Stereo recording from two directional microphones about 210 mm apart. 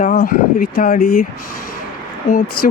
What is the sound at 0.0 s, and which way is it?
Speech, 40° left (ahead or behind).